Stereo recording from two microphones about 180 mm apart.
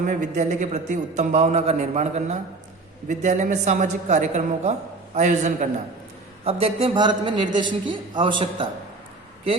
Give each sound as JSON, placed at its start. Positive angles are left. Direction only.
{"t": 0.0, "sound": "a man's voice", "side_deg": -45}